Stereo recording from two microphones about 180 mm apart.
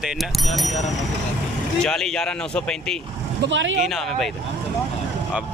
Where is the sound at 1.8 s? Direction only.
5° left (ahead or behind).